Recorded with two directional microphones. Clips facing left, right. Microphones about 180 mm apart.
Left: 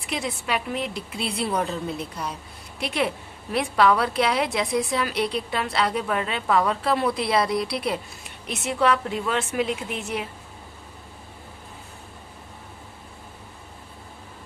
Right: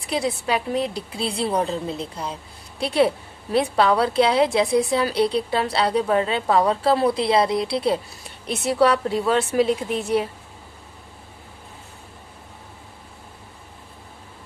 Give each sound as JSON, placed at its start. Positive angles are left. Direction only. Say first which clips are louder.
{"t": 0.0, "sound": "a woman's voice", "louder": "right 5 dB", "side_deg": -35}